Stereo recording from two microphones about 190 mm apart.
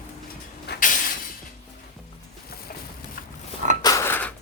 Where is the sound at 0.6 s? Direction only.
60° left (ahead or behind).